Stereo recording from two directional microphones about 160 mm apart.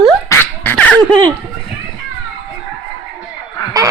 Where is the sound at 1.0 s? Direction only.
30° right (ahead or behind).